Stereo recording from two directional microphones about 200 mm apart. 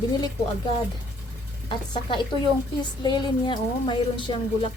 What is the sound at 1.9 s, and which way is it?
A woman's voice, 20° left (ahead or behind).